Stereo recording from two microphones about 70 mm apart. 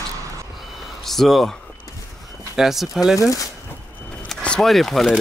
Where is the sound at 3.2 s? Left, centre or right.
Left.